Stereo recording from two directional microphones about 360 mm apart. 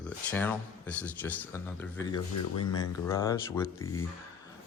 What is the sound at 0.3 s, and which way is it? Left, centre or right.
Speech, centre.